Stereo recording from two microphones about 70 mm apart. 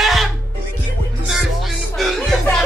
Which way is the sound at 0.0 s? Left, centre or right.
Centre.